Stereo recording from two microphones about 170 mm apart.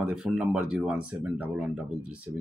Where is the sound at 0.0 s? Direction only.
5° right (ahead or behind).